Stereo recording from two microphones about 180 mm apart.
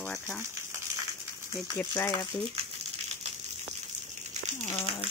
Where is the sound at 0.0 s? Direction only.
5° left (ahead or behind).